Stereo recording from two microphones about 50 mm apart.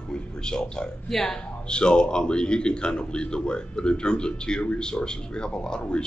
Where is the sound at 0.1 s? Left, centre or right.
Centre.